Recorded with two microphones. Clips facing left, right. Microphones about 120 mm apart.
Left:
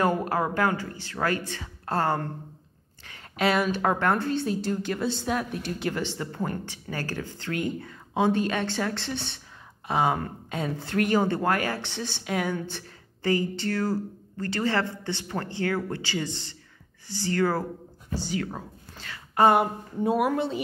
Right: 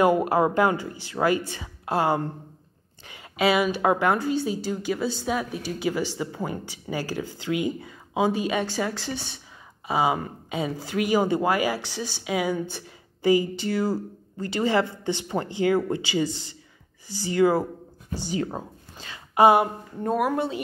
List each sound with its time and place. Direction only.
0.0 s a woman's voice: 15° right (ahead or behind)
19.6 s a woman's voice: 5° left (ahead or behind)